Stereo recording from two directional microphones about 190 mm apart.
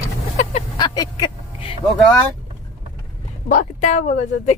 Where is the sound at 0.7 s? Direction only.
20° left (ahead or behind).